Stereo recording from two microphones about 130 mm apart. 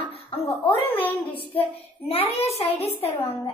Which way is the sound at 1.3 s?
45° left (ahead or behind).